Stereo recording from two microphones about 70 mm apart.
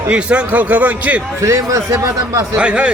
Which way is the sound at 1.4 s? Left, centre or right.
Right.